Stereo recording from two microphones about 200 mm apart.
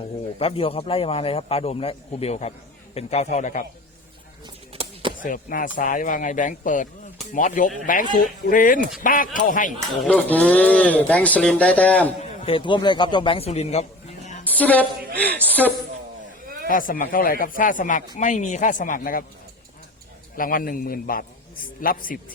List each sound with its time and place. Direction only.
0.3 s speech: 30° left (ahead or behind)
4.7 s a sound: 30° right (ahead or behind)
5.2 s a man's voice: 45° left (ahead or behind)
10.0 s speech: 5° left (ahead or behind)
12.5 s speech: 25° left (ahead or behind)
14.4 s a woman's voice: 10° left (ahead or behind)
16.6 s a man's voice: 45° left (ahead or behind)
20.3 s a man's voice: 45° left (ahead or behind)